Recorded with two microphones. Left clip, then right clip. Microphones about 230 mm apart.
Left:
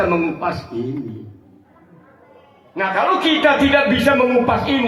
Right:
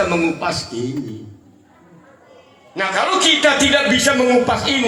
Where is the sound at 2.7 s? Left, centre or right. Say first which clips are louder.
Even; right.